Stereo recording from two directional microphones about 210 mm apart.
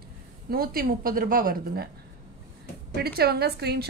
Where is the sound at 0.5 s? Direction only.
45° right (ahead or behind).